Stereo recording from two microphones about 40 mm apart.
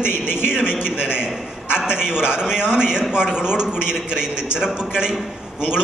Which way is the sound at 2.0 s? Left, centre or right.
Centre.